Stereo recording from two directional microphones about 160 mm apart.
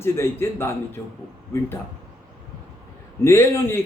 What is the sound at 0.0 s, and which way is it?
A man's voice, 15° left (ahead or behind).